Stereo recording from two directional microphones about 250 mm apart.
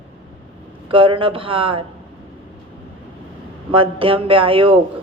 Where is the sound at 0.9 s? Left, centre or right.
Right.